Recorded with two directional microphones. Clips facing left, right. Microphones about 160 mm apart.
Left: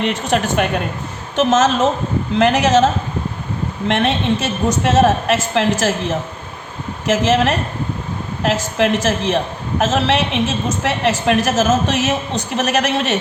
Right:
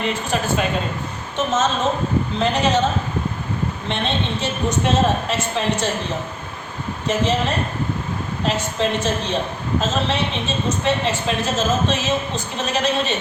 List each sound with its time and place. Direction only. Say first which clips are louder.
0.0 s a woman's voice: left 4 dB; 70° left (ahead or behind)
1.4 s a woman's voice: left 6 dB; 90° left
3.8 s a woman's voice: left 9 dB; 90° left